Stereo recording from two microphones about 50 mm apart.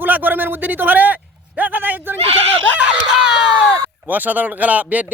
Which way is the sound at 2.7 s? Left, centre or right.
Right.